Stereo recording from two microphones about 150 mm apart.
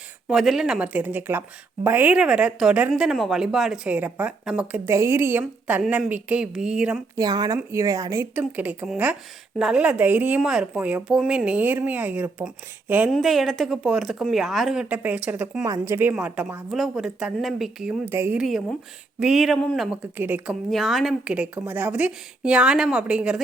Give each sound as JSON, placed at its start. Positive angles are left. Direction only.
{"t": 0.3, "sound": "a woman's voice", "side_deg": -5}
{"t": 7.2, "sound": "a woman's voice", "side_deg": -25}
{"t": 13.1, "sound": "speech", "side_deg": 0}
{"t": 15.6, "sound": "a woman's voice", "side_deg": -20}
{"t": 18.3, "sound": "speech", "side_deg": 0}
{"t": 20.1, "sound": "a woman's voice", "side_deg": -10}
{"t": 20.7, "sound": "a woman's voice", "side_deg": 0}